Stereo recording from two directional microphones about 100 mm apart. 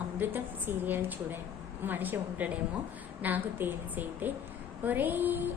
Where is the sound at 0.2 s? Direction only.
20° right (ahead or behind).